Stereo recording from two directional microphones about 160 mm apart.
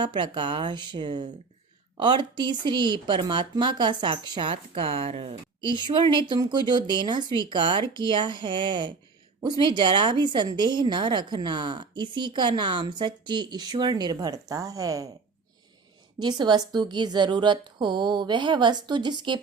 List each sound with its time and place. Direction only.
0.0 s a woman's voice: 30° right (ahead or behind)
5.6 s a woman's voice: 30° right (ahead or behind)
16.1 s a woman's voice: 25° right (ahead or behind)